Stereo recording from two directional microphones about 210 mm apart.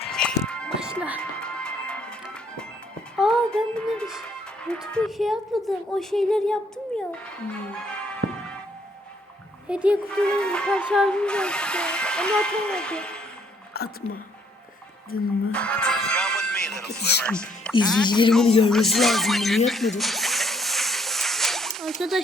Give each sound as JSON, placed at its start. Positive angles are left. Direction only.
{"t": 0.1, "sound": "music", "side_deg": 5}
{"t": 4.6, "sound": "a woman's voice", "side_deg": 5}
{"t": 9.6, "sound": "speech", "side_deg": -5}
{"t": 13.7, "sound": "speech", "side_deg": 50}
{"t": 15.5, "sound": "music", "side_deg": 5}
{"t": 17.2, "sound": "speech", "side_deg": 5}
{"t": 18.0, "sound": "speech", "side_deg": 20}
{"t": 18.7, "sound": "music", "side_deg": 0}